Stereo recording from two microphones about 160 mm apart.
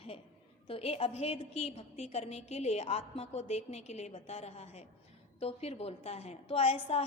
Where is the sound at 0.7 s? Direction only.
35° left (ahead or behind).